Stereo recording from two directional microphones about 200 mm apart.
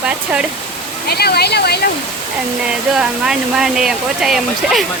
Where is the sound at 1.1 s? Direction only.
55° left (ahead or behind).